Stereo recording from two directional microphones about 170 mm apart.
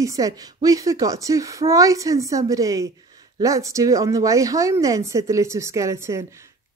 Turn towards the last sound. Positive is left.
turn(degrees=-15)  # may be behind; listen again after turning